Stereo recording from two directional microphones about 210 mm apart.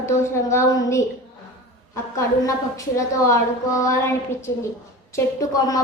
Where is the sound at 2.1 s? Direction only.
15° left (ahead or behind).